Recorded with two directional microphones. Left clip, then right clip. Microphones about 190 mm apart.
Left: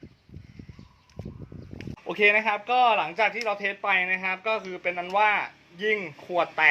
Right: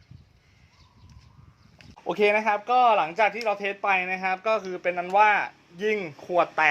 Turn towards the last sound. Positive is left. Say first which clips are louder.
# right 1 dB
turn(degrees=-45)  # may be behind; listen again after turning